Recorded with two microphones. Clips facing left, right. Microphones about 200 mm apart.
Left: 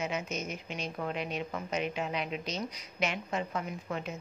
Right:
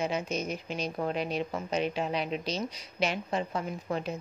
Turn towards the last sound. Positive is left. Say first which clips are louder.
# right 4 dB
turn(degrees=-35)  # may be behind; listen again after turning